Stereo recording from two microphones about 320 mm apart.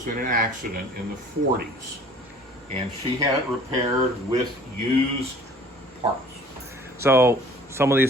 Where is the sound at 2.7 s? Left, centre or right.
Centre.